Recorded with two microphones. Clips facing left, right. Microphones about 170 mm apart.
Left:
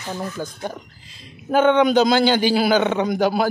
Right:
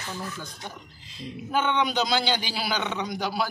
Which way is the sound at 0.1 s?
45° left (ahead or behind).